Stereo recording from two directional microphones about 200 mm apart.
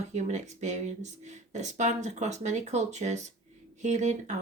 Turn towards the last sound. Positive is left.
turn(degrees=-35)  # may be behind; listen again after turning